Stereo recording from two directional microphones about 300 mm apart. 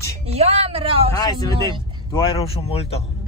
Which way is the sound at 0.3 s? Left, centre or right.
Centre.